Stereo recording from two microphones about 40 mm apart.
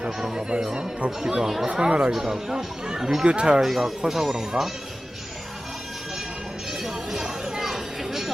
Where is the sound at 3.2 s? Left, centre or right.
Right.